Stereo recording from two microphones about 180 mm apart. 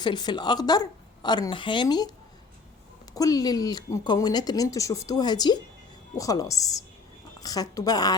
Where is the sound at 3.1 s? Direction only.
20° left (ahead or behind).